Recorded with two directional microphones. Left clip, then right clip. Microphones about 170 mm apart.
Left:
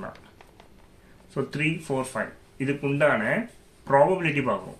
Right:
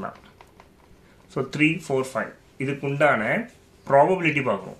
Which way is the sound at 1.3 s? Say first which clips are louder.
Right 5 dB; 35° right (ahead or behind).